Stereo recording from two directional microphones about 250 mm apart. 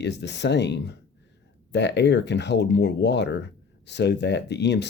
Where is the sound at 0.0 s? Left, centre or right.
Left.